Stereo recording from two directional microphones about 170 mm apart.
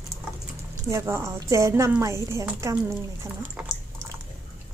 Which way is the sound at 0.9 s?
15° right (ahead or behind).